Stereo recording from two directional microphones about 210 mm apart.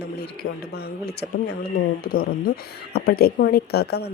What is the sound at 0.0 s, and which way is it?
A woman's voice, 50° left (ahead or behind).